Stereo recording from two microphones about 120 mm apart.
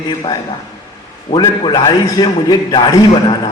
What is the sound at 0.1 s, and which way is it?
A man's voice, 40° left (ahead or behind).